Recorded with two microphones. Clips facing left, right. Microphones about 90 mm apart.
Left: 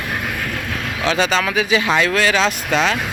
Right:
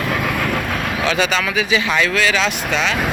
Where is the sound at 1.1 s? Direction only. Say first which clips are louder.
Left 3 dB; 35° left (ahead or behind).